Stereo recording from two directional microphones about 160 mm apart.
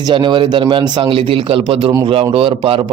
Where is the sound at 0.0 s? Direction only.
30° right (ahead or behind).